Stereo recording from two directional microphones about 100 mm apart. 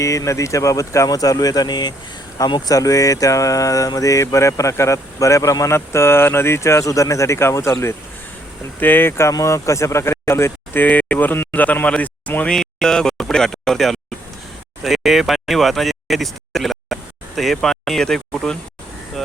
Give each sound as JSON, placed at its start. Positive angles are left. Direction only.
{"t": 0.0, "sound": "speech", "side_deg": 30}